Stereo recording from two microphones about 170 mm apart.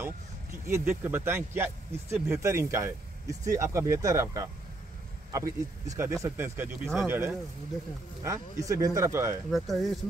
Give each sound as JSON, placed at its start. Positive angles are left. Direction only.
{"t": 0.7, "sound": "speech", "side_deg": -15}
{"t": 9.5, "sound": "speech", "side_deg": 0}